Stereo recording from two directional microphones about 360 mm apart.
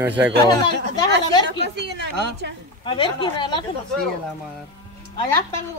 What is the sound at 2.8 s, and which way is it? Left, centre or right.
Speech, centre.